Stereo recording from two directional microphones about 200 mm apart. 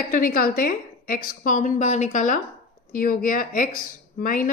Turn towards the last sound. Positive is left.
turn(degrees=45)  # may be behind; listen again after turning